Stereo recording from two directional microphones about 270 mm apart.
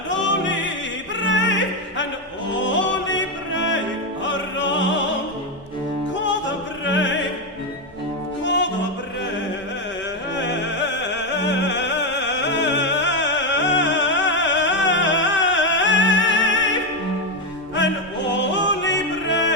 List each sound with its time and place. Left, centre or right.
0.1 s music: left
1.2 s opera: left
2.6 s music: left
6.1 s opera: left
8.4 s music: left
10.3 s music: left
17.7 s opera: left